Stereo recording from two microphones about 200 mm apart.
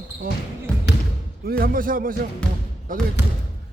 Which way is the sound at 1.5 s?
45° right (ahead or behind).